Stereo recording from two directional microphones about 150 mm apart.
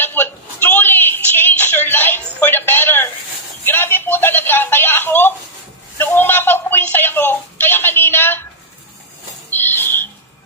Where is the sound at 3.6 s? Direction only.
15° left (ahead or behind).